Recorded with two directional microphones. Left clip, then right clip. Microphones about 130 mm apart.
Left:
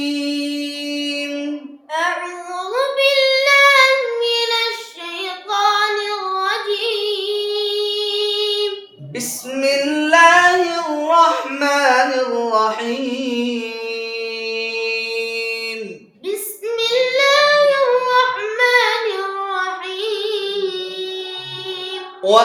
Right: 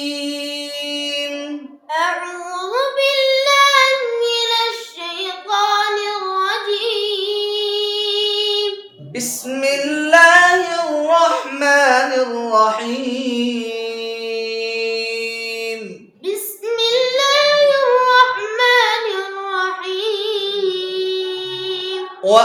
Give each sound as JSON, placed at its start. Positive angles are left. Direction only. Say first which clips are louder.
{"t": 2.7, "sound": "child singing", "louder": "left 1 dB", "side_deg": -35}
{"t": 9.6, "sound": "singing", "louder": "left 1 dB", "side_deg": 20}
{"t": 11.0, "sound": "a sound", "louder": "left 1 dB", "side_deg": 25}
{"t": 12.3, "sound": "music", "louder": "right 2 dB", "side_deg": 20}
{"t": 14.5, "sound": "mantra", "louder": "left 2 dB", "side_deg": 20}
{"t": 16.2, "sound": "female singing", "louder": "right 1 dB", "side_deg": -35}
{"t": 22.2, "sound": "child singing", "louder": "right 1 dB", "side_deg": 20}